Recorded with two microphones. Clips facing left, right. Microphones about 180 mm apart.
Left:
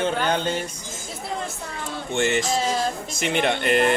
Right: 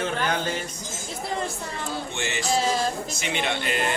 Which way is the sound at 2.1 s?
50° left (ahead or behind).